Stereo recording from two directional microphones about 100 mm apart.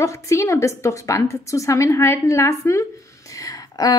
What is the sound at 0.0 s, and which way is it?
A woman's voice, 30° left (ahead or behind).